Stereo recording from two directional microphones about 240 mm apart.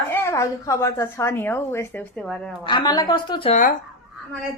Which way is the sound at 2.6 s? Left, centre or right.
Centre.